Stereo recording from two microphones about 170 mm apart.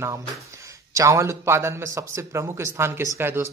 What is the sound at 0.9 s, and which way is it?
Speech, 20° right (ahead or behind).